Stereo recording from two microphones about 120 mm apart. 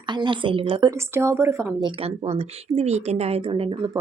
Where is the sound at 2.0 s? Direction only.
55° right (ahead or behind).